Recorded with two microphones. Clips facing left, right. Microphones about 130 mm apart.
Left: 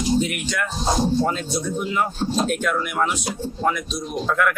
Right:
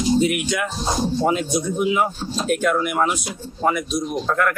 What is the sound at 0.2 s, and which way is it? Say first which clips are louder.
Speech: right 4 dB; 5° right (ahead or behind).